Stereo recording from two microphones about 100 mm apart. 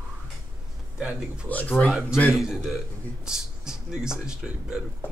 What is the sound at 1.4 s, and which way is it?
Speech, 15° left (ahead or behind).